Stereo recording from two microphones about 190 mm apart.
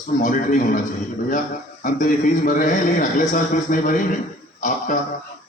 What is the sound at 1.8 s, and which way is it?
Music, 45° left (ahead or behind).